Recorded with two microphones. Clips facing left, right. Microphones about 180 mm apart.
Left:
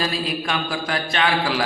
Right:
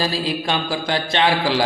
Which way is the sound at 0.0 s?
30° right (ahead or behind).